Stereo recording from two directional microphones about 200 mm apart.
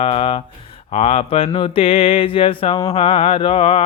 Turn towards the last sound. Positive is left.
turn(degrees=30)  # may be behind; listen again after turning